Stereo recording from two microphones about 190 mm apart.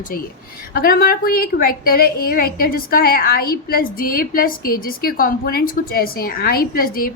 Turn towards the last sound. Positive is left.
turn(degrees=50)  # may be behind; listen again after turning